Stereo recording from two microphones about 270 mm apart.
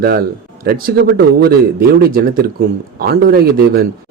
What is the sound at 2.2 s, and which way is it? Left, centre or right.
A man's voice, right.